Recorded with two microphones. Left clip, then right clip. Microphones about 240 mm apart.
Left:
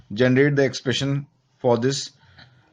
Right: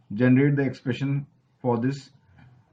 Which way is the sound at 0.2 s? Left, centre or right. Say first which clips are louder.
Left 4 dB; left.